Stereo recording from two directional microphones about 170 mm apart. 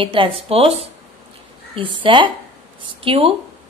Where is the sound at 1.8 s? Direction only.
30° right (ahead or behind).